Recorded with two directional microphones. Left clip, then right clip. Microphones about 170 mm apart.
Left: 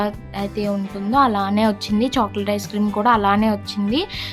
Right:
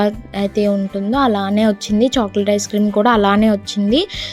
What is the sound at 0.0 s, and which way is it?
Speech, 25° right (ahead or behind).